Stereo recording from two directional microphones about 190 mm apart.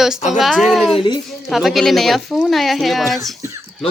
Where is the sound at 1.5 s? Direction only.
Centre (ahead or behind).